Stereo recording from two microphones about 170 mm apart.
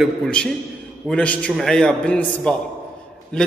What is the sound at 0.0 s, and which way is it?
A man's voice, 5° left (ahead or behind).